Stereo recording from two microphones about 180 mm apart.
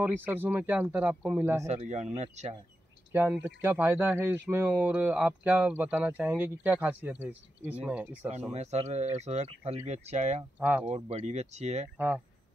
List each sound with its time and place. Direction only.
0.0 s speech: 10° right (ahead or behind)
1.7 s speech: 40° right (ahead or behind)
3.1 s speech: 10° right (ahead or behind)
8.5 s speech: 35° right (ahead or behind)
10.6 s speech: 10° right (ahead or behind)
10.9 s speech: 35° right (ahead or behind)